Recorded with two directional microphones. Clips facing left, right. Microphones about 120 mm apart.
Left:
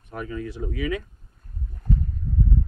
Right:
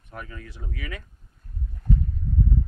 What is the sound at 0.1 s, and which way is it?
Speech, 15° left (ahead or behind).